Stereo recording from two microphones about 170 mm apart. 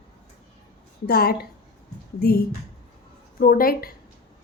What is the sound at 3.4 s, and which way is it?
Speech, 60° left (ahead or behind).